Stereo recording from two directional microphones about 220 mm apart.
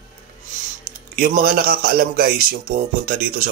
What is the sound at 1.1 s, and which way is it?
A man's voice, 40° right (ahead or behind).